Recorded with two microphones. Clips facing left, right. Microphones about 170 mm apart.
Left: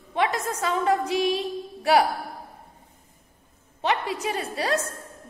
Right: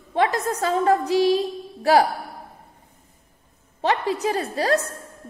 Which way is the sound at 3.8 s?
35° right (ahead or behind).